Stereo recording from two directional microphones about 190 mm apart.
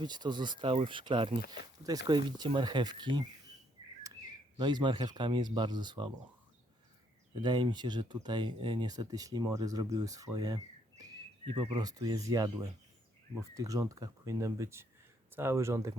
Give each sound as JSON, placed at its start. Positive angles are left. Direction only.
{"t": 0.0, "sound": "speech", "side_deg": -25}
{"t": 7.4, "sound": "speech", "side_deg": -25}